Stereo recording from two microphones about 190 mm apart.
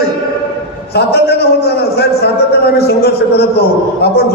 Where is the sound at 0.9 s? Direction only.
60° left (ahead or behind).